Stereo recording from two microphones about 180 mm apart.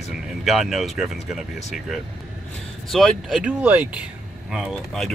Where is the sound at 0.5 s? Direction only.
Centre (ahead or behind).